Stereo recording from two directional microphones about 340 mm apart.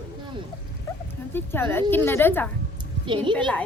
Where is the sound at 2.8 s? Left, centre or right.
Centre.